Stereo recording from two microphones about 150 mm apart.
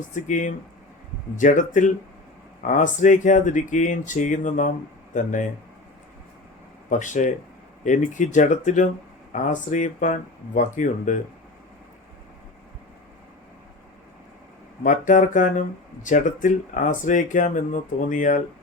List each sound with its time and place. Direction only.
0.1 s speech: 55° left (ahead or behind)
6.9 s speech: 55° left (ahead or behind)
14.8 s speech: 60° left (ahead or behind)